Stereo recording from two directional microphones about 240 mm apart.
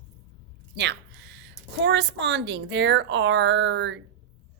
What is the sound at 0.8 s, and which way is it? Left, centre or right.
A woman's voice, right.